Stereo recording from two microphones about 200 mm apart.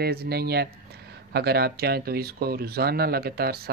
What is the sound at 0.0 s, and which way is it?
Speech, 55° right (ahead or behind).